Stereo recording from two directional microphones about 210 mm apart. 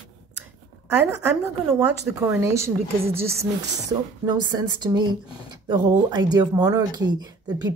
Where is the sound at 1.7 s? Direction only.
5° right (ahead or behind).